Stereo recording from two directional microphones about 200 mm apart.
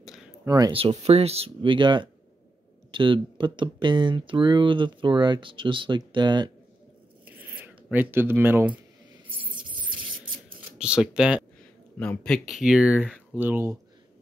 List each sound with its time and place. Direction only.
0.5 s speech: 20° right (ahead or behind)
7.2 s a sound: 10° right (ahead or behind)
10.8 s speech: 5° right (ahead or behind)